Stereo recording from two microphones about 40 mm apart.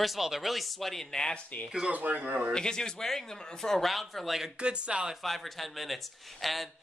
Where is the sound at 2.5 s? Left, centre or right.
Centre.